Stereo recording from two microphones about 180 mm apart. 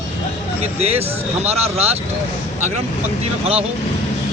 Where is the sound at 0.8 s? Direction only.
35° right (ahead or behind).